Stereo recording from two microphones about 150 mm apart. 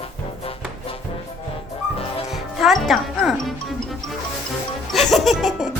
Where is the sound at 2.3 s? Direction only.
Centre (ahead or behind).